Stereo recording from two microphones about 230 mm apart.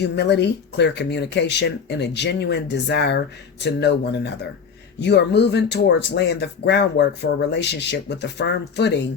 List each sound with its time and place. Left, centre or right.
0.0 s speech: left